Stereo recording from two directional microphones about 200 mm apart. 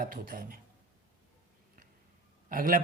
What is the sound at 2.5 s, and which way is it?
Speech, 45° right (ahead or behind).